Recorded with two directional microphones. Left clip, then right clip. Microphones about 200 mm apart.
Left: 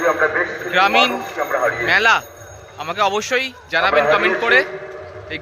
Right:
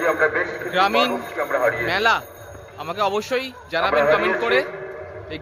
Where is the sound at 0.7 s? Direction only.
Centre (ahead or behind).